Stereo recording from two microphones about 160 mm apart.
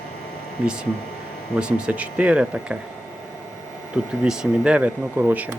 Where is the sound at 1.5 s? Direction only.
5° right (ahead or behind).